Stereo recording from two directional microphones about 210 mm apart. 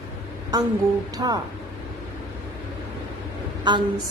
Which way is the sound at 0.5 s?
20° right (ahead or behind).